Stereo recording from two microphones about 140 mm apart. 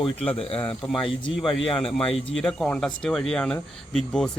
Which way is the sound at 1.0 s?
40° left (ahead or behind).